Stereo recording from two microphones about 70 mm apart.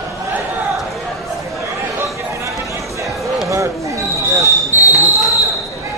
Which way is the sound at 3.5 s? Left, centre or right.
Right.